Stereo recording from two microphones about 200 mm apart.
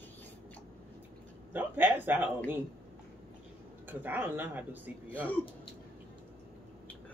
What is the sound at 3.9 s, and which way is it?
Speech, 10° right (ahead or behind).